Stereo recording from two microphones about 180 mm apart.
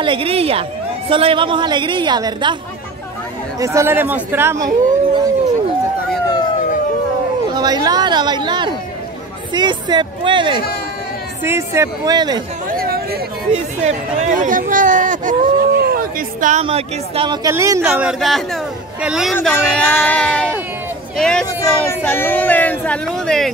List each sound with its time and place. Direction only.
0.0 s a woman's voice: 30° right (ahead or behind)
3.5 s speech: 15° right (ahead or behind)
7.5 s a woman's voice: 20° right (ahead or behind)
11.4 s speech: 15° right (ahead or behind)
12.6 s chatter: 55° right (ahead or behind)
13.5 s speech: 40° right (ahead or behind)
15.8 s a sound: 55° right (ahead or behind)
16.6 s speech: 30° right (ahead or behind); by 19.3 s 5° right (ahead or behind)
19.3 s speech: 10° left (ahead or behind)